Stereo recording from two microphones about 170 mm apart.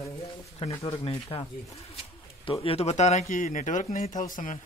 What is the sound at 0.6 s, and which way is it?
A man's voice, 35° left (ahead or behind).